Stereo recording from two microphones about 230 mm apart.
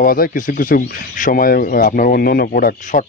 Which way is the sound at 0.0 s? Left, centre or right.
Left.